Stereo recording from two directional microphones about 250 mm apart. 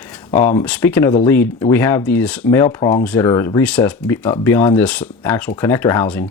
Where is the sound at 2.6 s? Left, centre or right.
Left.